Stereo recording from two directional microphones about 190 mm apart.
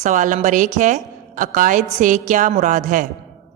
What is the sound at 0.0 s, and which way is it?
A woman's voice, 40° right (ahead or behind).